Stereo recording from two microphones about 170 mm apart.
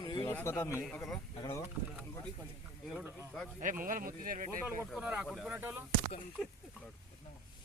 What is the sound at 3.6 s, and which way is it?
Speech, 50° right (ahead or behind).